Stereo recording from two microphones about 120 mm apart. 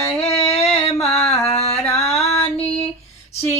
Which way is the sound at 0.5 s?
60° left (ahead or behind).